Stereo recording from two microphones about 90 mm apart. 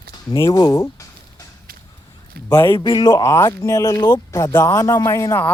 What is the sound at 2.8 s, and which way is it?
Speech, 60° left (ahead or behind).